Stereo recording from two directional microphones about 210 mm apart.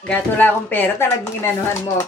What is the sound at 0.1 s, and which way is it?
Speech, 10° left (ahead or behind).